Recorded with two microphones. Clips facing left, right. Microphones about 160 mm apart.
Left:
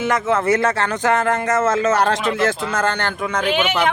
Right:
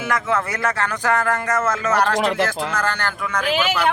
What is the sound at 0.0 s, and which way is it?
Speech, 25° left (ahead or behind).